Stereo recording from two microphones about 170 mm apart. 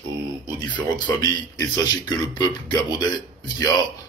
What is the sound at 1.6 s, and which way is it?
Speech, 25° left (ahead or behind).